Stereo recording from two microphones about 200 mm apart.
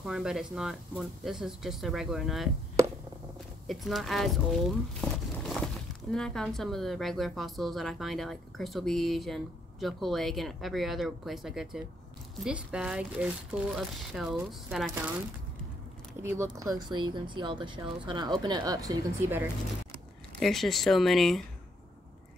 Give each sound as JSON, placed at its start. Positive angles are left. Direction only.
{"t": 0.0, "sound": "a woman's voice", "side_deg": 0}
{"t": 3.6, "sound": "a woman's voice", "side_deg": 0}
{"t": 16.2, "sound": "speech", "side_deg": -10}
{"t": 20.3, "sound": "a woman's voice", "side_deg": 0}